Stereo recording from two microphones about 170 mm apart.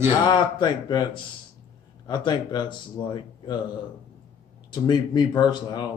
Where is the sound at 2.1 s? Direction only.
25° left (ahead or behind).